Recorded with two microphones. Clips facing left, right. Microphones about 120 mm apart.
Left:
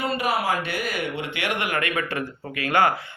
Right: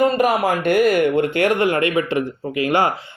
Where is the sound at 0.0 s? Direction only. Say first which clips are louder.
Right 8 dB; 45° right (ahead or behind).